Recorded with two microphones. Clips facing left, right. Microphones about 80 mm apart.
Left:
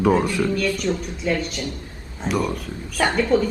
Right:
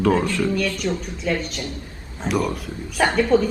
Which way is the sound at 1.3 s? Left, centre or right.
Centre.